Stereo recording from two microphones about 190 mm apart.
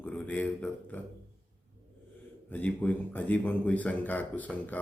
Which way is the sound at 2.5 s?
10° left (ahead or behind).